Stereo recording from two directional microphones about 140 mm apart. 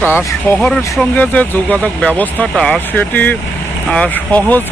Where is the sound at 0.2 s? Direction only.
15° left (ahead or behind).